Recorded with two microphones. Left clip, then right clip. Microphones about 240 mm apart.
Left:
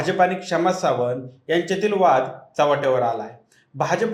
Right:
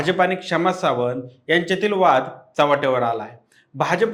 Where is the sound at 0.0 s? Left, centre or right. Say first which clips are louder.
Even; right.